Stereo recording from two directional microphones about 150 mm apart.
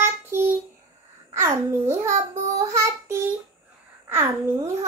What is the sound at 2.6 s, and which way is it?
Child singing, 20° right (ahead or behind).